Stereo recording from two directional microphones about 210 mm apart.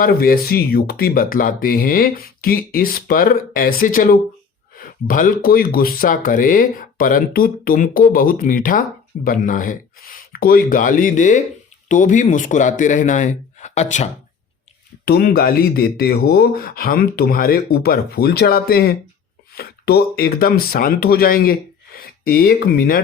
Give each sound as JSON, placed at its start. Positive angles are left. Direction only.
{"t": 0.0, "sound": "speech", "side_deg": 45}
{"t": 15.0, "sound": "speech", "side_deg": 45}